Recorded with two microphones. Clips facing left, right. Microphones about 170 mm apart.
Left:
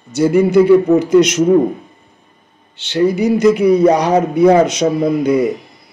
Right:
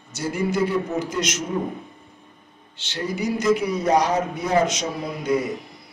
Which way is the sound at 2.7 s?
65° left (ahead or behind).